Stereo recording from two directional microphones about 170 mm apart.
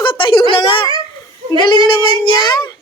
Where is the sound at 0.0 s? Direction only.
30° left (ahead or behind).